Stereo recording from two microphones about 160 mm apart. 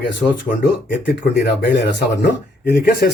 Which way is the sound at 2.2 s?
90° left.